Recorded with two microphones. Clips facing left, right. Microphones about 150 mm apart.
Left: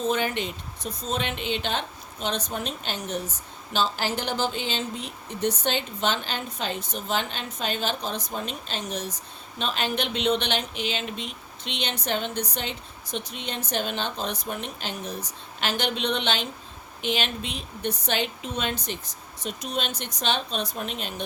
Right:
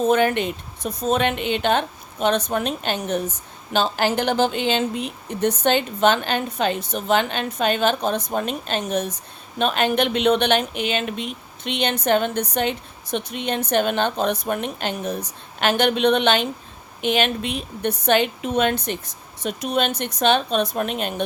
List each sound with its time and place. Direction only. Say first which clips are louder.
0.0 s speech: right 8 dB; 55° right (ahead or behind)